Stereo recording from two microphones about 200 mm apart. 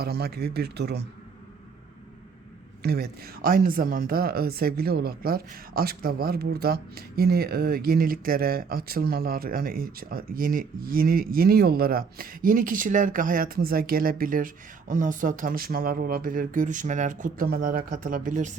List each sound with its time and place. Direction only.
0.0 s speech: 55° right (ahead or behind)
2.8 s speech: 50° right (ahead or behind)